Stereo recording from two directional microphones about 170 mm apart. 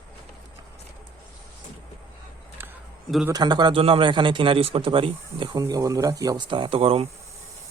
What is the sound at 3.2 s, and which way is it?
A man's voice, 25° right (ahead or behind).